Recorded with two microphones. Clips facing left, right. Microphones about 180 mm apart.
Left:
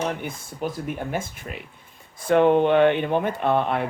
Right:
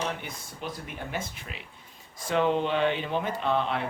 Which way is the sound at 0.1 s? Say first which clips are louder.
Left 6 dB; 50° left (ahead or behind).